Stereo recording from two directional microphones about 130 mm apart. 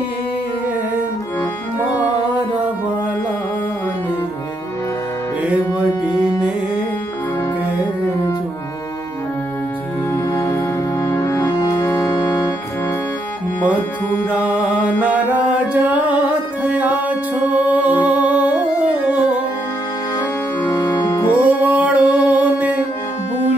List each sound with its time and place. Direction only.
10.1 s music: 25° left (ahead or behind)
14.4 s mantra: 10° right (ahead or behind)
15.7 s music: 10° right (ahead or behind)
20.6 s organ: 30° left (ahead or behind)
21.3 s music: 10° right (ahead or behind)